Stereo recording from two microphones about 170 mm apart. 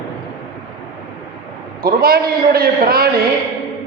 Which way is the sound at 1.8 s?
60° right (ahead or behind).